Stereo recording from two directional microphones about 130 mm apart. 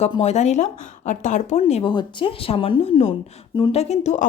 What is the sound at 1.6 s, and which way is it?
Speech, 55° left (ahead or behind).